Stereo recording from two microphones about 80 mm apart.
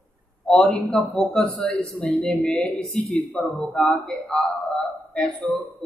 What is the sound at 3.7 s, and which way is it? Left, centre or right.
Speech, centre.